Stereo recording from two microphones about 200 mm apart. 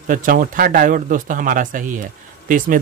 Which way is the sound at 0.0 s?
40° right (ahead or behind).